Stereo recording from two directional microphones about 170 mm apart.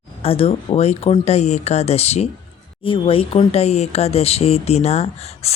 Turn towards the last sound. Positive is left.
turn(degrees=40)  # may be behind; listen again after turning